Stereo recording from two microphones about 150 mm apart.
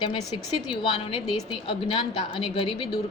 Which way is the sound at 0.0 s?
40° left (ahead or behind).